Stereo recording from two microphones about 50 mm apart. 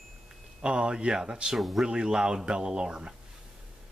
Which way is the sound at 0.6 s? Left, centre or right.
Centre.